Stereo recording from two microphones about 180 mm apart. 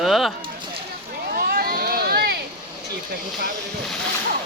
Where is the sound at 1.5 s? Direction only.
55° right (ahead or behind).